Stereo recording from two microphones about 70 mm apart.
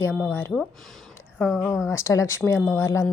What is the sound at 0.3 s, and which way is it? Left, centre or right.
Speech, left.